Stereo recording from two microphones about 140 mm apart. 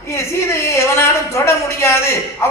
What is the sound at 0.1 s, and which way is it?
A woman's voice, 20° left (ahead or behind).